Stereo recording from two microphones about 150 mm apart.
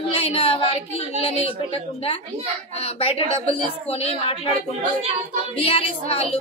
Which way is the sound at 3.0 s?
40° left (ahead or behind).